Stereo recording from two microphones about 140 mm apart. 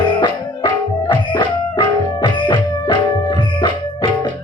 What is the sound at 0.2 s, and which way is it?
Music, 30° left (ahead or behind).